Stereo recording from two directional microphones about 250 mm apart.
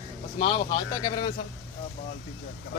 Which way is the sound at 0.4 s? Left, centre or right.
Centre.